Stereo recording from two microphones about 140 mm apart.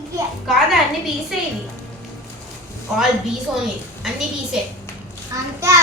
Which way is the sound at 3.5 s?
Centre (ahead or behind).